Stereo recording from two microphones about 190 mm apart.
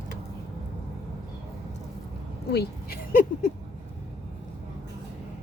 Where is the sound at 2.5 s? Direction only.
55° left (ahead or behind).